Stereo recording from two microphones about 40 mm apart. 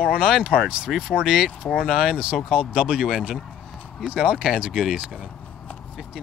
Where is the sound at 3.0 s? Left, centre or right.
Centre.